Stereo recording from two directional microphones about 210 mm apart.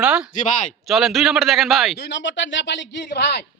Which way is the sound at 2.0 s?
60° left (ahead or behind).